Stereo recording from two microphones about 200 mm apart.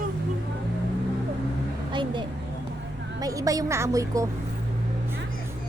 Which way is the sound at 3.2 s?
15° right (ahead or behind).